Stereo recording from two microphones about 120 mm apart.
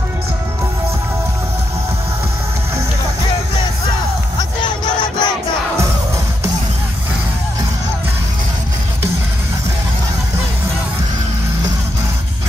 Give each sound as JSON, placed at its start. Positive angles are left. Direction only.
{"t": 4.4, "sound": "battle cry", "side_deg": 40}